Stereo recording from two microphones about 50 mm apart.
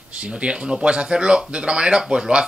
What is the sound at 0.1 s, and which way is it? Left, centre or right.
Speech, right.